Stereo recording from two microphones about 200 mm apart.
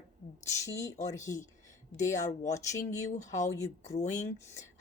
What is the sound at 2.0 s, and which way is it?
Speech, 35° left (ahead or behind).